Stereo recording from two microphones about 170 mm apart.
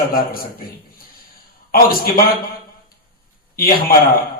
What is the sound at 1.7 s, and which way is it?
Speech, 60° left (ahead or behind).